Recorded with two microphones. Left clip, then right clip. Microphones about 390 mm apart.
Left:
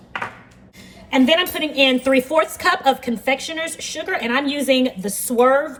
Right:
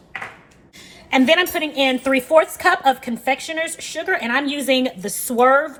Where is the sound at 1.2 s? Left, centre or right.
Centre.